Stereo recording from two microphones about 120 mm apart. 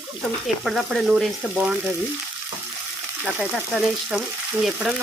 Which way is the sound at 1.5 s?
15° right (ahead or behind).